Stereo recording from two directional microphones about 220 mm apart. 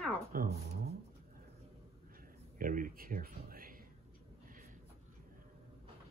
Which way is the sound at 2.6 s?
40° right (ahead or behind).